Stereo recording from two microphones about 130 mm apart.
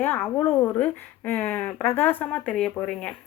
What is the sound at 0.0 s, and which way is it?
Speech, 15° left (ahead or behind).